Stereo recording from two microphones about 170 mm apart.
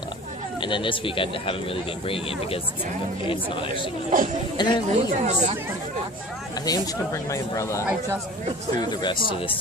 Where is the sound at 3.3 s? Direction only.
30° left (ahead or behind).